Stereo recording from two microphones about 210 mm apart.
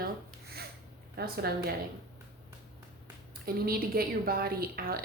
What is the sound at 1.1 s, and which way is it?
Speech, 50° right (ahead or behind).